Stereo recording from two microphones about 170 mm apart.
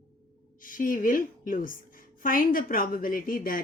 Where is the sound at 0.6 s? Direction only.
55° left (ahead or behind).